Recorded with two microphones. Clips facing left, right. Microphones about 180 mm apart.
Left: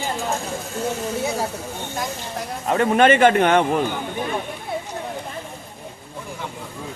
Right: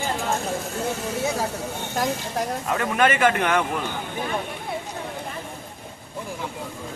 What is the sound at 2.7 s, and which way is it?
A man's voice, 35° left (ahead or behind).